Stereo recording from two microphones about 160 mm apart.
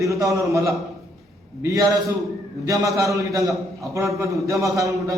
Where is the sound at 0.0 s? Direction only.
20° right (ahead or behind).